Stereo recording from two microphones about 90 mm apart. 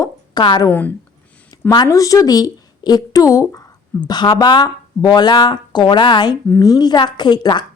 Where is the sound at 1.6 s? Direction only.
45° left (ahead or behind).